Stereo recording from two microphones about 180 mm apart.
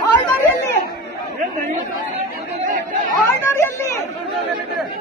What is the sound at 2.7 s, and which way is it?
Chatter, 45° right (ahead or behind).